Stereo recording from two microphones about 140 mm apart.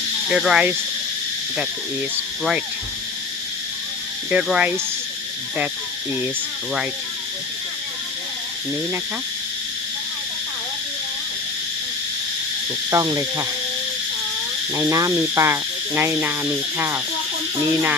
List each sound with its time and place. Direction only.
0.3 s speech: 5° right (ahead or behind)
4.3 s speech: 5° right (ahead or behind)
12.9 s speech: 25° right (ahead or behind)
14.8 s speech: 20° right (ahead or behind)